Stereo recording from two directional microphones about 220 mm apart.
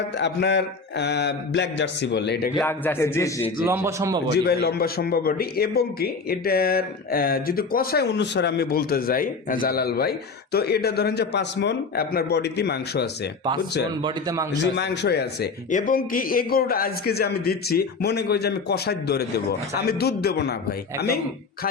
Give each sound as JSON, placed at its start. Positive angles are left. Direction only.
{"t": 0.2, "sound": "a man's voice", "side_deg": 50}
{"t": 2.6, "sound": "a man's voice", "side_deg": 10}
{"t": 3.7, "sound": "speech", "side_deg": -10}
{"t": 4.3, "sound": "a man's voice", "side_deg": 45}
{"t": 14.0, "sound": "a man's voice", "side_deg": -20}
{"t": 14.8, "sound": "a man's voice", "side_deg": 50}
{"t": 15.7, "sound": "a man's voice", "side_deg": 40}